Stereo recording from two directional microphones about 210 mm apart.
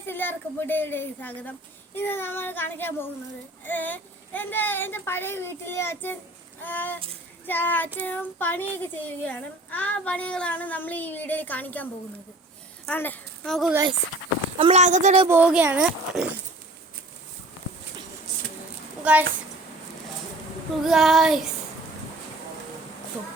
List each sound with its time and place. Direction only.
0.0 s a child's voice: 10° left (ahead or behind)
14.6 s a woman's voice: 30° right (ahead or behind)
15.3 s speech: 5° right (ahead or behind)
19.1 s speech: 5° right (ahead or behind)
20.8 s child singing: centre (ahead or behind)